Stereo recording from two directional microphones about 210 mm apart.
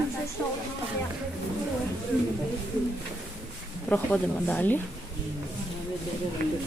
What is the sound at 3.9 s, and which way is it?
Speech, 5° left (ahead or behind).